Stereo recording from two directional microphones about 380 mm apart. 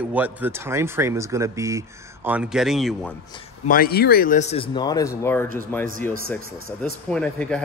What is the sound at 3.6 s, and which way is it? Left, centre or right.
Speech, left.